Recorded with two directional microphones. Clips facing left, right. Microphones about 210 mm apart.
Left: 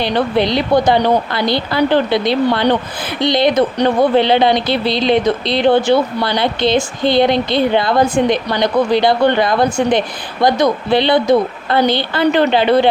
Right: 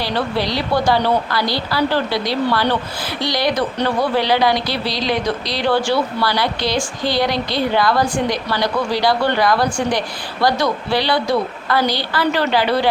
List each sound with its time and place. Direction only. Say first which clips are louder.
0.0 s speech: left 5 dB; 20° left (ahead or behind)